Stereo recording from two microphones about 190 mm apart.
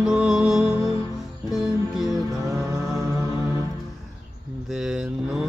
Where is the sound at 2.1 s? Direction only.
15° right (ahead or behind).